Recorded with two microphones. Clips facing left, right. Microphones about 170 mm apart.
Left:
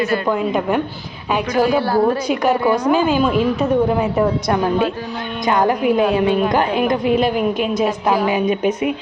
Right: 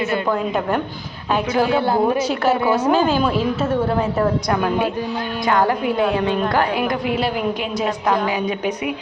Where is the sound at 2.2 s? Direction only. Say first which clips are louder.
Left 2 dB; 15° left (ahead or behind).